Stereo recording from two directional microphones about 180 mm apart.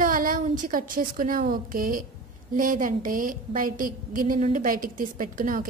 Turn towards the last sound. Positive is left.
turn(degrees=-50)  # may be behind; listen again after turning